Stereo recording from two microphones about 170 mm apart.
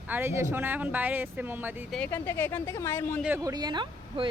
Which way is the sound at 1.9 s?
10° left (ahead or behind).